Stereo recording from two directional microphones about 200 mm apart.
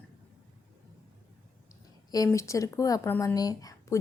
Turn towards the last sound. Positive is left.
turn(degrees=20)  # may be behind; listen again after turning